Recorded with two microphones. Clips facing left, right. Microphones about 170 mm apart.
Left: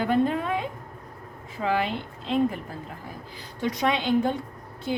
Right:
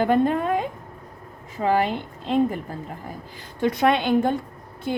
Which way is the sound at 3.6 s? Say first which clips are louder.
Right 5 dB; 55° right (ahead or behind).